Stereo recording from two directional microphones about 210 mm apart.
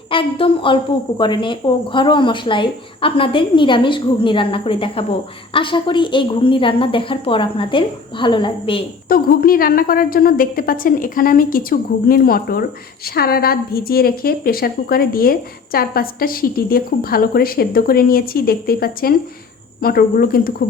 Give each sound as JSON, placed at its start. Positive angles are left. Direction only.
{"t": 0.1, "sound": "speech", "side_deg": 25}
{"t": 9.0, "sound": "a woman's voice", "side_deg": 45}